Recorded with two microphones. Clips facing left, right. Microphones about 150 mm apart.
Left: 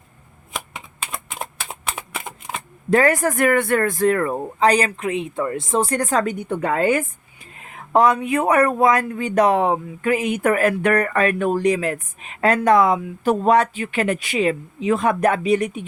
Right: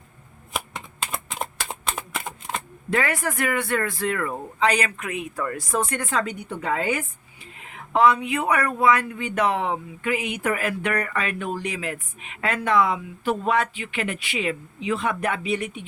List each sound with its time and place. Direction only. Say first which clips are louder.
1.1 s typing: even; centre (ahead or behind)
1.9 s a sound: left 1 dB; 5° left (ahead or behind)
2.9 s speech: left 8 dB; 40° left (ahead or behind)